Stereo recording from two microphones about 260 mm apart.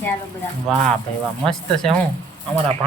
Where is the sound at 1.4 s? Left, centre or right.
Centre.